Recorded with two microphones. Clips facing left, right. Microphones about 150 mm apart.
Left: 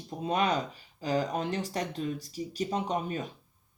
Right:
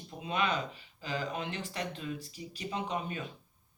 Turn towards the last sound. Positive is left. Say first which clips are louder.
# left 4 dB
turn(degrees=40)  # may be behind; listen again after turning